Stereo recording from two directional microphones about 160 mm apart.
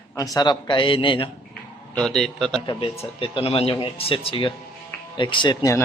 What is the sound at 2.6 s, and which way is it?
Speech, 35° left (ahead or behind).